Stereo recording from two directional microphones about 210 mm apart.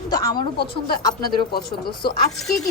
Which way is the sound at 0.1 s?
15° left (ahead or behind).